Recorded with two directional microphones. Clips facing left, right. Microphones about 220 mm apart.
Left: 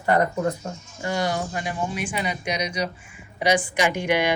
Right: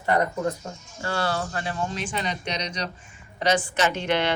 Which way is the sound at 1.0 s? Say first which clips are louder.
Left 2 dB; 15° left (ahead or behind).